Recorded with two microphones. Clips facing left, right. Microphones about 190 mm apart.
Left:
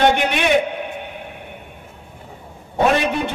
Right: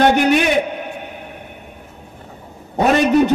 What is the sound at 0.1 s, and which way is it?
Speech, 40° right (ahead or behind).